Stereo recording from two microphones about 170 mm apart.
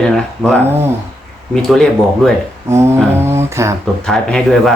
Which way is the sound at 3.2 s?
15° right (ahead or behind).